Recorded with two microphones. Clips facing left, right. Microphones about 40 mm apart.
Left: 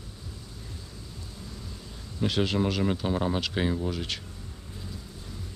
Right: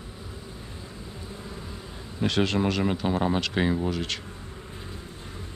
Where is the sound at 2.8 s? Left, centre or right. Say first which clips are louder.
Right 2 dB; centre.